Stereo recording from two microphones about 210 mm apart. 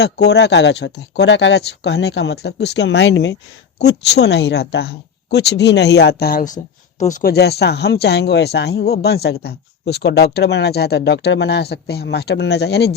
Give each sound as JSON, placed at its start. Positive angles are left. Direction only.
{"t": 0.0, "sound": "speech", "side_deg": 55}